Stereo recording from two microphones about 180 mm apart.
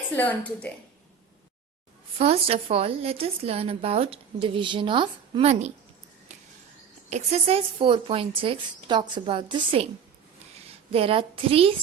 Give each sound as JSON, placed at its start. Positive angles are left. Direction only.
{"t": 0.1, "sound": "a woman's voice", "side_deg": 10}
{"t": 2.1, "sound": "a woman's voice", "side_deg": -35}
{"t": 7.1, "sound": "a woman's voice", "side_deg": -35}